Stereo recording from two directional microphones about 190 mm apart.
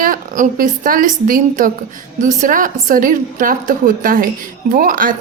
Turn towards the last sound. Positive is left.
turn(degrees=-45)  # may be behind; listen again after turning